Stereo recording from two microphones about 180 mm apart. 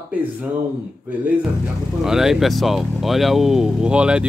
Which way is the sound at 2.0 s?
5° right (ahead or behind).